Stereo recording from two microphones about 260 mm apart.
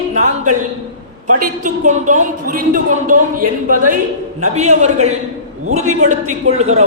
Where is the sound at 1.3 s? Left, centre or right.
Right.